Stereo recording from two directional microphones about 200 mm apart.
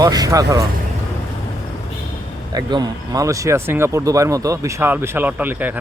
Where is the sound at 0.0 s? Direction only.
20° right (ahead or behind).